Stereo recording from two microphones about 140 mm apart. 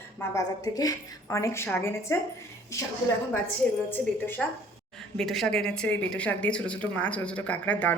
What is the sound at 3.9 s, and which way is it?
Speech, 15° left (ahead or behind).